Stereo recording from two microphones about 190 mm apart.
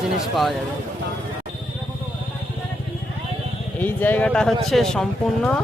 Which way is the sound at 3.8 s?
10° left (ahead or behind).